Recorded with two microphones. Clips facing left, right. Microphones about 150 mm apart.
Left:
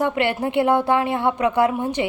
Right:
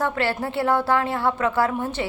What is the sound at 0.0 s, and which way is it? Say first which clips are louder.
A woman's voice: left 3 dB; 20° left (ahead or behind).